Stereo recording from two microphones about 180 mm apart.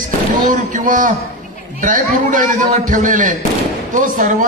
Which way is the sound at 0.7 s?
45° right (ahead or behind).